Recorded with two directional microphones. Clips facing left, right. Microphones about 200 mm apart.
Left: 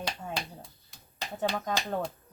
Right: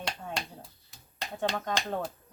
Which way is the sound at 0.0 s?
5° left (ahead or behind).